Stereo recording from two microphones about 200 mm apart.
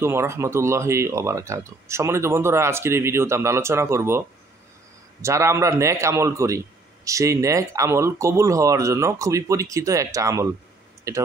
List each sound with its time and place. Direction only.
0.0 s speech: 15° right (ahead or behind)
5.2 s speech: 15° right (ahead or behind)